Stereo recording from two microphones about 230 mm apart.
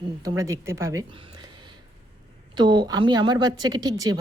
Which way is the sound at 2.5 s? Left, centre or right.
Centre.